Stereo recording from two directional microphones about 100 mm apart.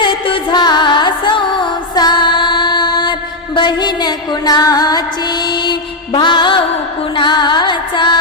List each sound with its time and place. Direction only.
0.0 s music: 50° left (ahead or behind)
6.1 s music: 50° left (ahead or behind)